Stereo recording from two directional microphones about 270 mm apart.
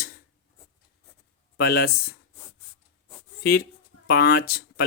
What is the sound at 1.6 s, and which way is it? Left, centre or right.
Speech, left.